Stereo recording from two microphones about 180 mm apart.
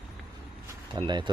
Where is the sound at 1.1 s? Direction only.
25° right (ahead or behind).